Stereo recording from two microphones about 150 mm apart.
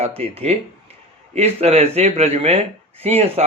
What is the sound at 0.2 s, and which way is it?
Speech, 45° right (ahead or behind).